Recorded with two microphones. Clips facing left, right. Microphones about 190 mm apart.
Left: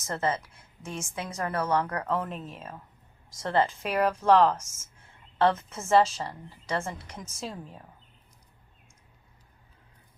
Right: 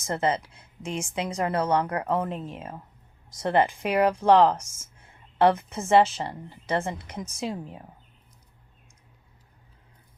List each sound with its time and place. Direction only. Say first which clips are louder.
0.0 s a woman's voice: right 3 dB; 20° right (ahead or behind)